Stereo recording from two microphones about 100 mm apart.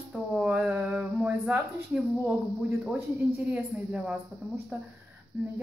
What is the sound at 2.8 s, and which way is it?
Speech, 10° right (ahead or behind).